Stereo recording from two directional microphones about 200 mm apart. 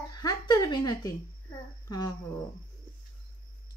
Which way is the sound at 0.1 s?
20° left (ahead or behind).